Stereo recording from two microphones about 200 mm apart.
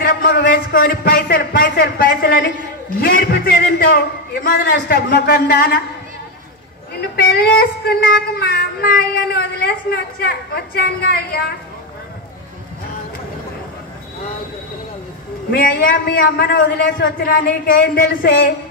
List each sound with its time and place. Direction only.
0.0 s a man's voice: 45° left (ahead or behind)
7.2 s speech: 50° left (ahead or behind)
15.5 s speech: 45° left (ahead or behind)